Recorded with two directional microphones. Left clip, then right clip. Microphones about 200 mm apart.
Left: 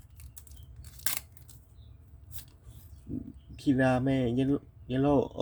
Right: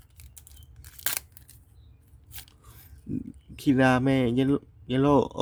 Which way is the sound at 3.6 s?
30° right (ahead or behind).